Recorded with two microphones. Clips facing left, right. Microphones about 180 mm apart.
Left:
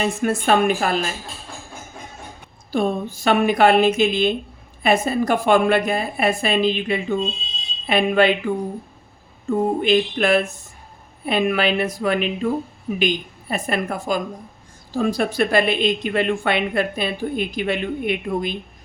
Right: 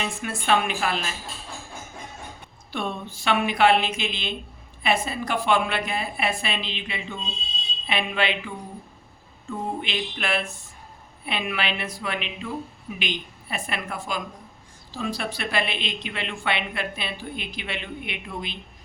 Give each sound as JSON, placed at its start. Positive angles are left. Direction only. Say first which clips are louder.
{"t": 0.0, "sound": "speech", "louder": "left 9 dB", "side_deg": 45}
{"t": 2.7, "sound": "speech", "louder": "left 9 dB", "side_deg": 40}